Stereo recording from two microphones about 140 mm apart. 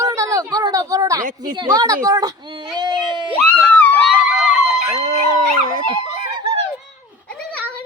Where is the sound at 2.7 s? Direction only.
30° right (ahead or behind).